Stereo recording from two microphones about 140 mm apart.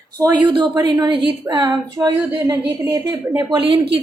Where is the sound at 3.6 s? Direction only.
40° right (ahead or behind).